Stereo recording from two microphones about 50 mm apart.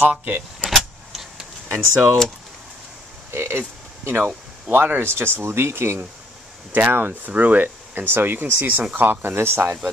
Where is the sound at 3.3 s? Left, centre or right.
Right.